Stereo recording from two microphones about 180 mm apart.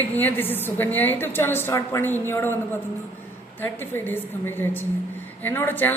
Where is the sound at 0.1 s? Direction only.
10° left (ahead or behind).